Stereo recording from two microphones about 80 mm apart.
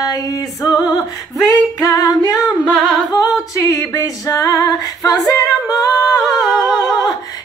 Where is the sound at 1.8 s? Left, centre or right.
Left.